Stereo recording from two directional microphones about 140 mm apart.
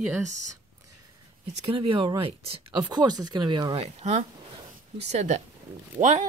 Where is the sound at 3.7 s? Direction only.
45° right (ahead or behind).